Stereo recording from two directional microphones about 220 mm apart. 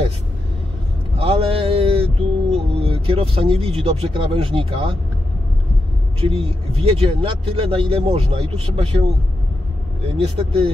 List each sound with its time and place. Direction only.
1.1 s a sound: 25° right (ahead or behind)
2.5 s speech: 25° right (ahead or behind)
6.2 s speech: 25° right (ahead or behind)
10.1 s speech: 25° right (ahead or behind)